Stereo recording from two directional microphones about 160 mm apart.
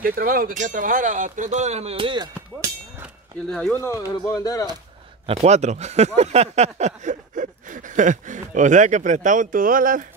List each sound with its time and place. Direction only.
0.0 s speech: 65° right (ahead or behind); by 2.2 s 30° right (ahead or behind)
3.4 s speech: 5° left (ahead or behind)
4.1 s speech: 25° left (ahead or behind)
5.2 s speech: 40° right (ahead or behind); by 10.0 s 60° right (ahead or behind)